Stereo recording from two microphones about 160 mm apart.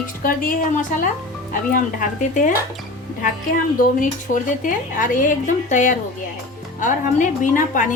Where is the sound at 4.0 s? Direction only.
55° left (ahead or behind).